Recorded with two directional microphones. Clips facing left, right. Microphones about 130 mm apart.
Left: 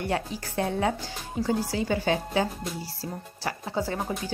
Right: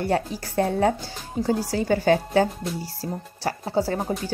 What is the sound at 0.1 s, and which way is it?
Speech, 40° right (ahead or behind).